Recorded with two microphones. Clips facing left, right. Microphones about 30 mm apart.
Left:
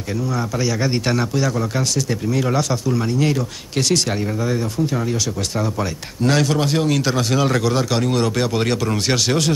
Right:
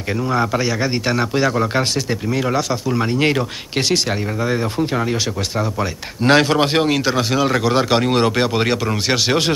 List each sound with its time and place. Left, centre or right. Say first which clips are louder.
0.3 s speech: right 8 dB; right
0.6 s speech: right 1 dB; centre
1.3 s speech: right 4 dB; right; by 3.0 s centre
3.0 s speech: right 5 dB; right
3.9 s speech: left 1 dB; right
6.2 s speech: right 4 dB; right
7.0 s speech: right 1 dB; centre
7.7 s speech: right 3 dB; right
8.5 s speech: right 1 dB; centre